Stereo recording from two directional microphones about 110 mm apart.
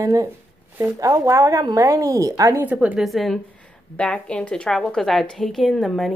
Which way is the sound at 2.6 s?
15° right (ahead or behind).